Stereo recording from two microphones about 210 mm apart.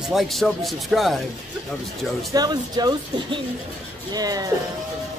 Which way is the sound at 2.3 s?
20° right (ahead or behind).